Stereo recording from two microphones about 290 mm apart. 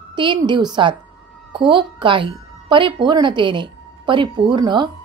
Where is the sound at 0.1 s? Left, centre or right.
Centre.